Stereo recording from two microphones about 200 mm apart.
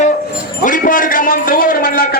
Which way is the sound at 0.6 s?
40° left (ahead or behind).